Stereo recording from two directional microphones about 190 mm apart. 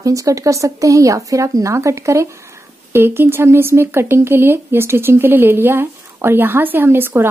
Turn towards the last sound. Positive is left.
turn(degrees=-10)  # may be behind; listen again after turning